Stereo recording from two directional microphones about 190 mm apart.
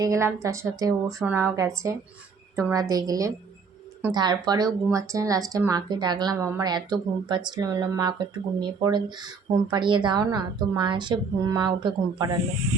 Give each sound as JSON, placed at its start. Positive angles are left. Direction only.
{"t": 0.0, "sound": "a woman's voice", "side_deg": -15}